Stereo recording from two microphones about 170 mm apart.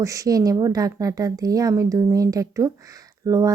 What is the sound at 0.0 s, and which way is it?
A woman's voice, 20° right (ahead or behind).